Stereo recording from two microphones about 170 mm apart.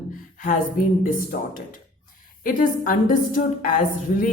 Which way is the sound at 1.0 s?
55° left (ahead or behind).